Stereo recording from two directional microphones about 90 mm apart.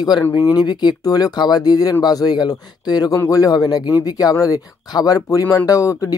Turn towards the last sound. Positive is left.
turn(degrees=40)  # may be behind; listen again after turning